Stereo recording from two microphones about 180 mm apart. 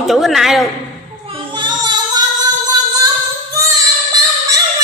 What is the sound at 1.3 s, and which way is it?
Child singing, 25° right (ahead or behind).